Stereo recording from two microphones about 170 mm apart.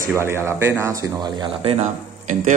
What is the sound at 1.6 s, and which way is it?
Speech, 40° right (ahead or behind).